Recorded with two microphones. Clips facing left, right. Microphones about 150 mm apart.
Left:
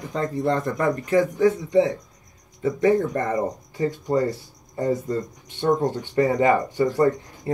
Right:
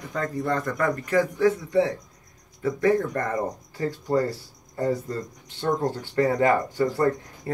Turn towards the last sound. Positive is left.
turn(degrees=20)  # may be behind; listen again after turning